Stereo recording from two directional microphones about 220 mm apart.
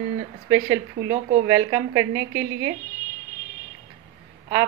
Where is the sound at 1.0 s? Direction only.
35° right (ahead or behind).